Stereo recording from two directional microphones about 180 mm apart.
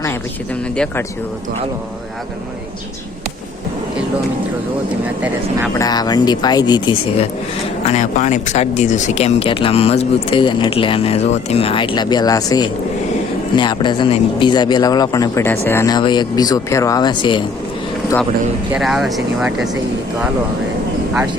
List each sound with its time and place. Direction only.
5.7 s speech: 20° left (ahead or behind)
7.9 s speech: 40° left (ahead or behind); by 17.4 s 25° left (ahead or behind)
18.7 s speech: centre (ahead or behind)